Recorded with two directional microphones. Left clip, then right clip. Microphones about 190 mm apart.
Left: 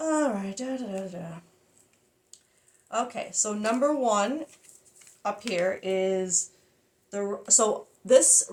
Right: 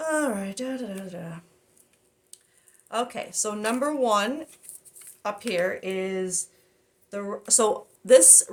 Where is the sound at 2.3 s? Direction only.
45° right (ahead or behind).